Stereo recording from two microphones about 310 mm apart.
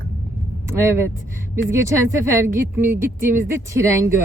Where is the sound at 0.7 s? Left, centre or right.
Centre.